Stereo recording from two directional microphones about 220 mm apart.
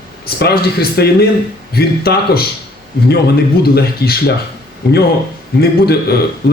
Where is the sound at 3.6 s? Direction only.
45° left (ahead or behind).